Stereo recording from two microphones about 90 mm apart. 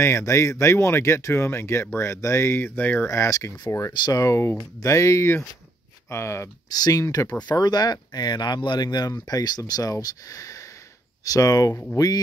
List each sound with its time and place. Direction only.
0.0 s speech: 30° left (ahead or behind)
3.1 s speech: 35° left (ahead or behind)
3.9 s speech: 55° left (ahead or behind)
4.2 s speech: 35° left (ahead or behind)
6.7 s speech: 45° left (ahead or behind)